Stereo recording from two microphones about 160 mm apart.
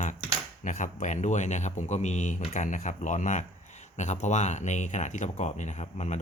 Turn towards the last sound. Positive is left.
turn(degrees=45)  # may be behind; listen again after turning